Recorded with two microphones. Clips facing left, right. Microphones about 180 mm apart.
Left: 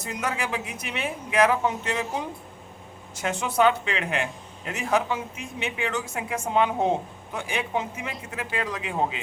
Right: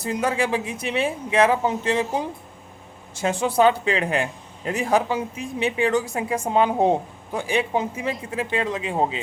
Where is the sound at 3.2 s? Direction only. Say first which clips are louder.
Right 4 dB; 30° right (ahead or behind).